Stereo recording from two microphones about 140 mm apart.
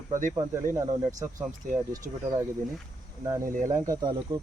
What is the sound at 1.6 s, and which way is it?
Speech, 70° right (ahead or behind).